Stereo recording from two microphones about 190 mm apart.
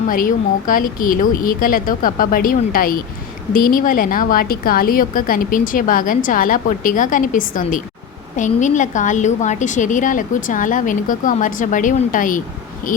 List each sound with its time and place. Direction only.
0.1 s a woman's voice: 45° left (ahead or behind)